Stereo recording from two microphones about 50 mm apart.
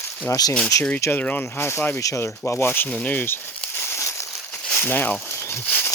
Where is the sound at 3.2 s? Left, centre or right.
Left.